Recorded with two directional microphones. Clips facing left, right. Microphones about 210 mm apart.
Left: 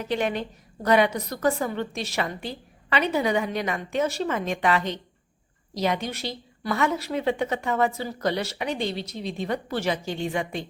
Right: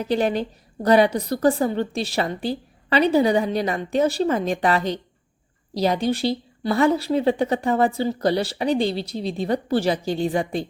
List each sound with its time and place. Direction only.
0.0 s a woman's voice: 35° right (ahead or behind)